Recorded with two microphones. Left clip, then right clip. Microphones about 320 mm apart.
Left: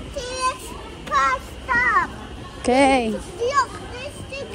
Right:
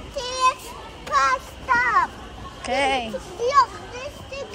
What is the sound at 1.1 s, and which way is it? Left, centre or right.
Child singing, right.